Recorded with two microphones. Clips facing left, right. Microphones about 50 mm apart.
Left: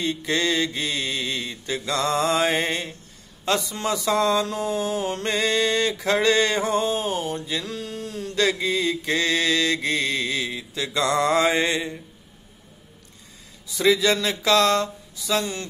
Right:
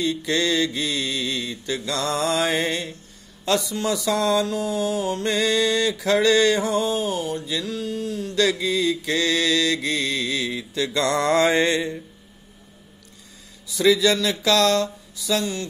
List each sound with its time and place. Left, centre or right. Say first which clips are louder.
0.0 s mantra: right 1 dB; left
3.9 s mantra: even; left
5.3 s mantra: right 1 dB; left
7.6 s a sound: right 4 dB; left
8.4 s mantra: right 1 dB; left
10.5 s mantra: right 3 dB; centre
13.7 s mantra: right 1 dB; centre